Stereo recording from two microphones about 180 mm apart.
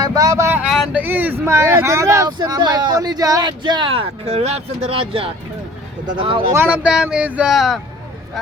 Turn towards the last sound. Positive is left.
turn(degrees=0)  # may be behind; listen again after turning